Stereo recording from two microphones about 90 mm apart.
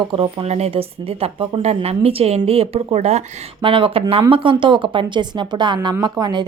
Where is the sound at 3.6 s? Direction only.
75° right (ahead or behind); by 4.2 s 90° right.